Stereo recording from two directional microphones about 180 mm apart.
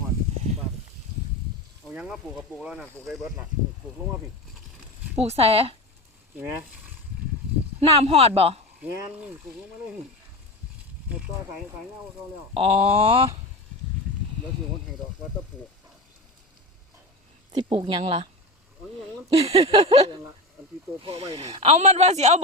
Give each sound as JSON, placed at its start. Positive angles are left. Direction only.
{"t": 1.9, "sound": "speech", "side_deg": -5}
{"t": 5.1, "sound": "speech", "side_deg": -35}
{"t": 6.3, "sound": "speech", "side_deg": -10}
{"t": 7.9, "sound": "speech", "side_deg": -35}
{"t": 12.5, "sound": "speech", "side_deg": -30}
{"t": 17.5, "sound": "speech", "side_deg": -30}
{"t": 19.3, "sound": "speech", "side_deg": -35}